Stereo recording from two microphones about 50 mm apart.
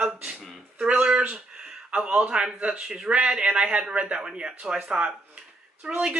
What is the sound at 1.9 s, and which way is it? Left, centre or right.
Speech, right.